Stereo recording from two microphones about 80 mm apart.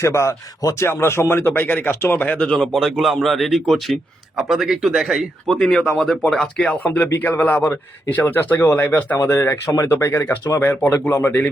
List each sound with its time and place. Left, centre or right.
0.0 s speech: left
2.2 s speech: centre
2.6 s speech: centre
5.5 s speech: centre
9.1 s speech: left